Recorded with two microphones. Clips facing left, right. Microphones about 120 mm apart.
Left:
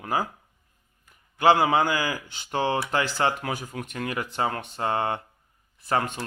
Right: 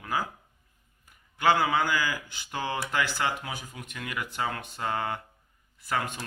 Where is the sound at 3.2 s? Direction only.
55° left (ahead or behind).